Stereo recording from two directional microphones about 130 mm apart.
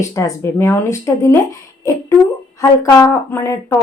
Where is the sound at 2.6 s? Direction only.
25° left (ahead or behind).